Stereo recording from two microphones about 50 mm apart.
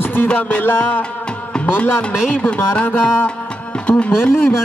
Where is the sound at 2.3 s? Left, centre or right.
Left.